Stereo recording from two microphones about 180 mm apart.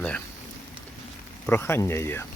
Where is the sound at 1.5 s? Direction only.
10° left (ahead or behind).